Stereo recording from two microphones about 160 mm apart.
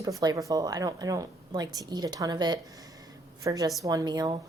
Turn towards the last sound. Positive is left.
turn(degrees=-25)  # may be behind; listen again after turning